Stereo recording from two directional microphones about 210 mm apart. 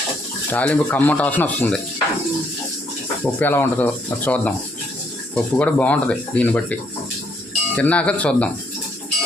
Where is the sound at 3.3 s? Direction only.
10° left (ahead or behind).